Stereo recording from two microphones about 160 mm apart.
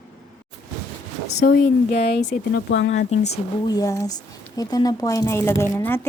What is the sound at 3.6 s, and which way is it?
A woman's voice, 25° left (ahead or behind).